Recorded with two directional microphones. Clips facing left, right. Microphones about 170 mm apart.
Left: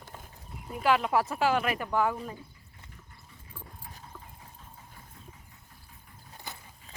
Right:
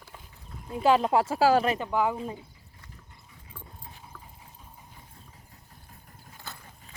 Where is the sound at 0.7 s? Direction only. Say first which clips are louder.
Right 4 dB; 30° right (ahead or behind).